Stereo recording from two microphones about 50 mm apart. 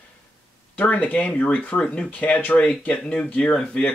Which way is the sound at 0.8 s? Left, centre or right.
Left.